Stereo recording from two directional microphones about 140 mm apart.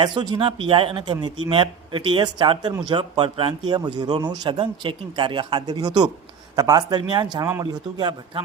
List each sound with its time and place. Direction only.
0.0 s speech: 35° right (ahead or behind)